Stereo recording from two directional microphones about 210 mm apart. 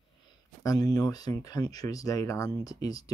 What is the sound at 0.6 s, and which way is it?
Speech, 15° left (ahead or behind).